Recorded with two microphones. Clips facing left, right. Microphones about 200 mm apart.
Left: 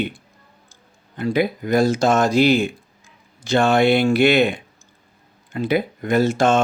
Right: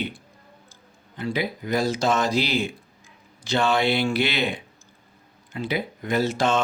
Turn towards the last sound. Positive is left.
turn(degrees=50)  # may be behind; listen again after turning